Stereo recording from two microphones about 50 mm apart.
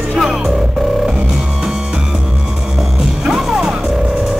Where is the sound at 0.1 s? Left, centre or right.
Centre.